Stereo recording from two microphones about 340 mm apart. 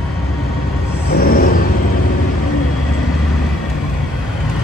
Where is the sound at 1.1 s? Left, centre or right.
Left.